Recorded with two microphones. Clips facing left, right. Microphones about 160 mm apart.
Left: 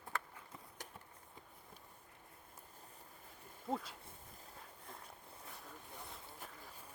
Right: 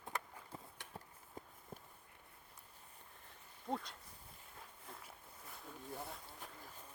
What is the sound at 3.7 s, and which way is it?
Speech, 5° left (ahead or behind).